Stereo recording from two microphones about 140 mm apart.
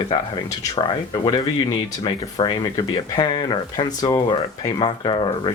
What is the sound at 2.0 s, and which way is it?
Speech, 30° left (ahead or behind).